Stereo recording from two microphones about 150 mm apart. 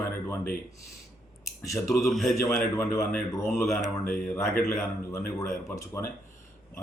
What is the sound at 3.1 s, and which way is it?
Speech, 15° left (ahead or behind).